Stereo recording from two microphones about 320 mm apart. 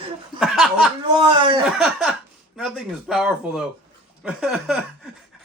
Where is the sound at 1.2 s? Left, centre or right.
Centre.